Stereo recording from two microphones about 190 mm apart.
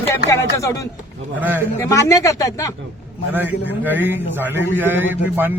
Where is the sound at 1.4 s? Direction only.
10° right (ahead or behind).